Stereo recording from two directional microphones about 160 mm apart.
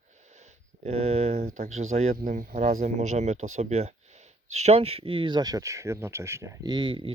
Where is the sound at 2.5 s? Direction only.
40° right (ahead or behind).